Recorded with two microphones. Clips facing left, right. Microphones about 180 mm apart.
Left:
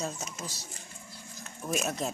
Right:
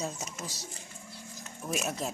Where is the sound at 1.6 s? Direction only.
5° right (ahead or behind).